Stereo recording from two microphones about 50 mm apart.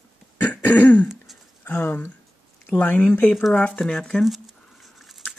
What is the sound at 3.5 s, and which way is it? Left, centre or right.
Speech, left.